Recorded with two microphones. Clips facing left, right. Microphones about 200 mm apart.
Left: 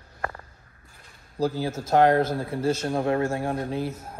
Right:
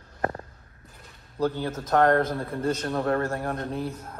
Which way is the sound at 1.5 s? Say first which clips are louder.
Left 4 dB; 10° left (ahead or behind).